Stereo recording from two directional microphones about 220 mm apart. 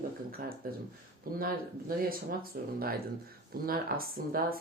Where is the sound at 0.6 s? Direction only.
40° right (ahead or behind).